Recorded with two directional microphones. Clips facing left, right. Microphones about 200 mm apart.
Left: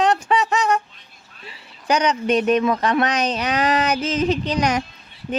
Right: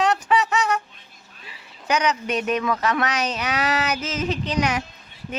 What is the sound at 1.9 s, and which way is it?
Speech, 30° left (ahead or behind).